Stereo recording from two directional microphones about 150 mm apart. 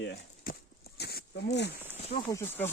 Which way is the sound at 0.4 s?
90° left.